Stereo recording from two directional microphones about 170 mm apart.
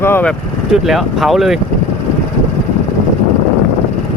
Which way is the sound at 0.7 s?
Centre (ahead or behind).